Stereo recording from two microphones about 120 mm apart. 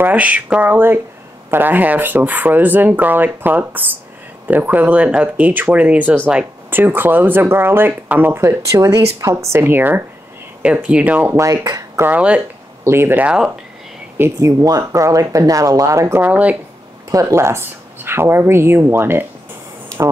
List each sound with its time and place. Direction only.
0.0 s speech: 15° right (ahead or behind)
11.3 s speech: 25° right (ahead or behind)
12.1 s speech: 10° right (ahead or behind)
14.1 s speech: 20° right (ahead or behind)
17.1 s speech: 25° right (ahead or behind)